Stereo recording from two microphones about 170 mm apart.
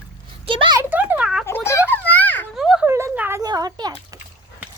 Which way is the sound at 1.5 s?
15° left (ahead or behind).